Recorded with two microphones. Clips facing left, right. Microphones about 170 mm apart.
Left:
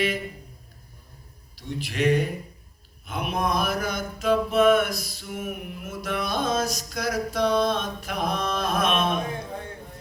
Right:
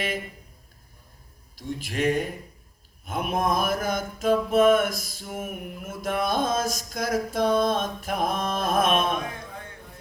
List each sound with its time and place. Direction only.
1.5 s speech: 45° right (ahead or behind)
3.1 s mantra: 45° right (ahead or behind)